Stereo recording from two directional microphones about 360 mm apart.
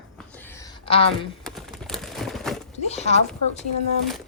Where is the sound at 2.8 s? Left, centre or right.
Centre.